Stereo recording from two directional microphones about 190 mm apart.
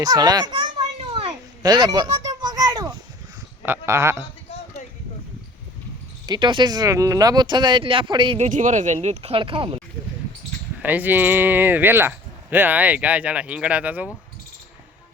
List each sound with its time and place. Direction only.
0.0 s speech: 20° right (ahead or behind)
1.6 s a sound: 20° right (ahead or behind)
3.7 s speech: 15° right (ahead or behind)
6.2 s speech: 25° right (ahead or behind)
8.4 s speech: 40° right (ahead or behind)
10.8 s speech: 10° right (ahead or behind)